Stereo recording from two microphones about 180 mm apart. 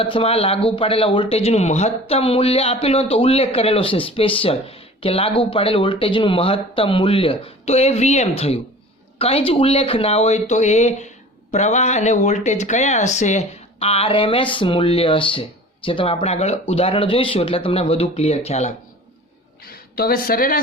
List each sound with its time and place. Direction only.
0.0 s speech: 30° left (ahead or behind)
19.6 s a woman's voice: 55° left (ahead or behind)